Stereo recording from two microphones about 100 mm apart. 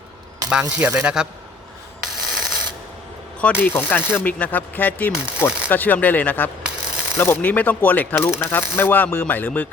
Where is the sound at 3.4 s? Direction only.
20° left (ahead or behind).